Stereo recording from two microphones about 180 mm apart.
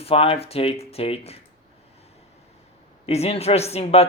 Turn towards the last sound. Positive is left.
turn(degrees=35)  # may be behind; listen again after turning